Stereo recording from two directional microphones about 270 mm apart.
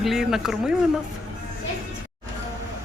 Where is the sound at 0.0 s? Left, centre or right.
Centre.